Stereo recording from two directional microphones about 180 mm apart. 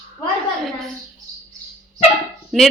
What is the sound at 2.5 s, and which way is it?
Speech, centre (ahead or behind).